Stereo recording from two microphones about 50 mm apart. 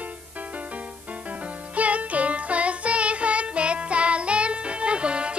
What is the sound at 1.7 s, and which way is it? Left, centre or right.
Music, right.